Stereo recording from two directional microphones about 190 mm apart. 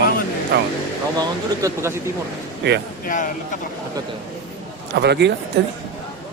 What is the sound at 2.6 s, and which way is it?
Speech, 65° right (ahead or behind).